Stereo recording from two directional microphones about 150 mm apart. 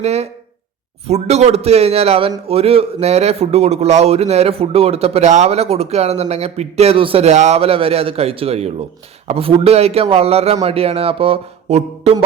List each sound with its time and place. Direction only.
0.0 s a man's voice: 45° right (ahead or behind)